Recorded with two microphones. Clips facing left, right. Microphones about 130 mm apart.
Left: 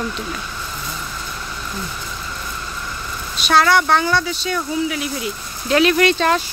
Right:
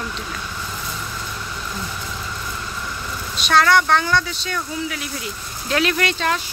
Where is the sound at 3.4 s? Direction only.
5° left (ahead or behind).